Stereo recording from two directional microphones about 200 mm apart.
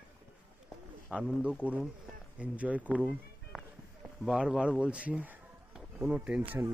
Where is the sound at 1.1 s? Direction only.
5° right (ahead or behind).